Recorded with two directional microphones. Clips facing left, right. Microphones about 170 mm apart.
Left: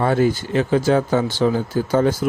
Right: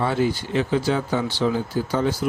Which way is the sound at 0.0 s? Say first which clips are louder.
Left 4 dB; 50° left (ahead or behind).